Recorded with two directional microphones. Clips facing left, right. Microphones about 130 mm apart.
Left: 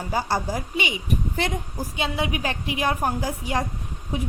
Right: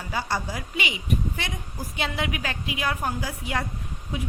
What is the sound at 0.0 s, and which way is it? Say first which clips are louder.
Speech: left 4 dB; 40° left (ahead or behind).